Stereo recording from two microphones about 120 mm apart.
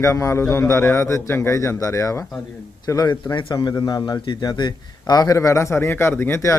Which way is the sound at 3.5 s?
30° left (ahead or behind).